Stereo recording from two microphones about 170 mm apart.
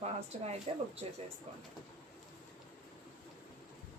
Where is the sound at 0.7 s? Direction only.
35° right (ahead or behind).